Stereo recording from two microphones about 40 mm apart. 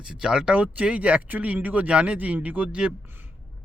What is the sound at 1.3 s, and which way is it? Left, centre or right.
Speech, right.